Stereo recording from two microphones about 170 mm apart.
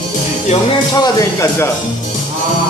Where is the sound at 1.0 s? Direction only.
20° left (ahead or behind).